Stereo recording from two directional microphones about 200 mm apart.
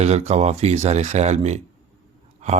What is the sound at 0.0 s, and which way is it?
A man's voice, 35° right (ahead or behind).